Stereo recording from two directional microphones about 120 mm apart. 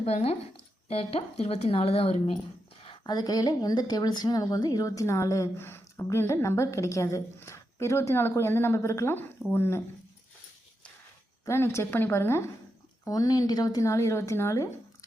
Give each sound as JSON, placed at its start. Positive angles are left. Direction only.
{"t": 0.0, "sound": "speech", "side_deg": 60}
{"t": 3.0, "sound": "a woman's voice", "side_deg": 35}
{"t": 11.4, "sound": "a woman's voice", "side_deg": 20}